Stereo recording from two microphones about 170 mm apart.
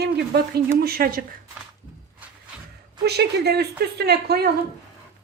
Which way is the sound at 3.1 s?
75° right (ahead or behind).